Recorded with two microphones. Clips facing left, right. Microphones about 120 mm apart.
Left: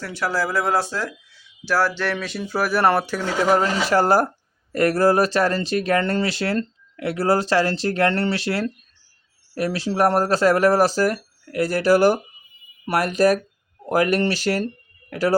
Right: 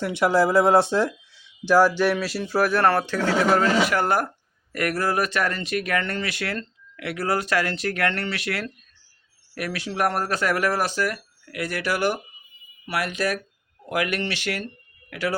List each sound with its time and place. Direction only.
0.0 s speech: 20° right (ahead or behind); by 3.6 s 10° left (ahead or behind)
3.6 s speech: 30° left (ahead or behind)